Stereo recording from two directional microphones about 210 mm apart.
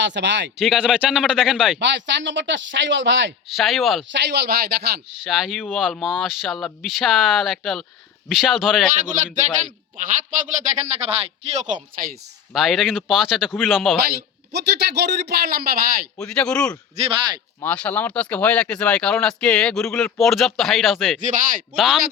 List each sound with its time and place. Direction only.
0.0 s speech: 55° right (ahead or behind)
0.6 s speech: 5° right (ahead or behind)
1.8 s speech: 60° right (ahead or behind)
3.5 s speech: centre (ahead or behind)
4.1 s a man's voice: 55° right (ahead or behind)
5.2 s speech: centre (ahead or behind)
9.0 s speech: 35° right (ahead or behind)
10.9 s speech: 30° right (ahead or behind)
11.7 s a man's voice: 40° right (ahead or behind)
12.5 s speech: centre (ahead or behind)
14.2 s a man's voice: 50° right (ahead or behind)
16.1 s speech: 5° left (ahead or behind)
21.2 s speech: 35° right (ahead or behind)
21.8 s speech: centre (ahead or behind)